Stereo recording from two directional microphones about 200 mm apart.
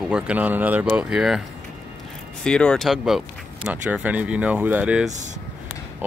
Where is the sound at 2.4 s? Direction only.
5° left (ahead or behind).